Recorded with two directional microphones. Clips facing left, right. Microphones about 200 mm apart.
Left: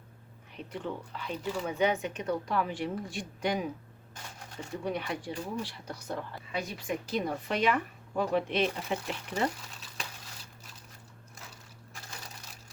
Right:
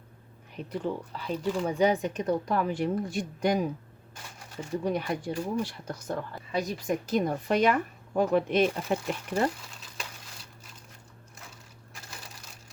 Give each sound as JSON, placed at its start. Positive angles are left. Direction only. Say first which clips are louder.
{"t": 0.5, "sound": "speech", "louder": "right 5 dB", "side_deg": -40}
{"t": 4.9, "sound": "a woman's voice", "louder": "right 3 dB", "side_deg": -40}